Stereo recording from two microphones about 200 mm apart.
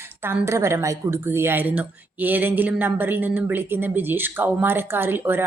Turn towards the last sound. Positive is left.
turn(degrees=-10)  # may be behind; listen again after turning